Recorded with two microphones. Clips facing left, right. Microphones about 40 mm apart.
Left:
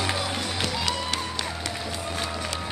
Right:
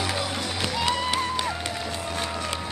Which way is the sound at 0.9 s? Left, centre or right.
Right.